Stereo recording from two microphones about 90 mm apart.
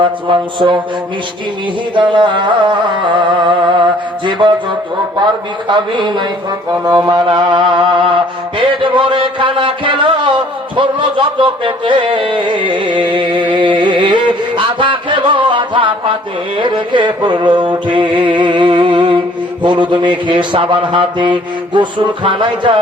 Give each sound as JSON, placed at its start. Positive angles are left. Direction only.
{"t": 0.0, "sound": "mantra", "side_deg": -65}
{"t": 2.0, "sound": "mantra", "side_deg": -60}
{"t": 6.8, "sound": "mantra", "side_deg": -50}
{"t": 13.6, "sound": "music", "side_deg": -65}
{"t": 16.6, "sound": "mantra", "side_deg": -65}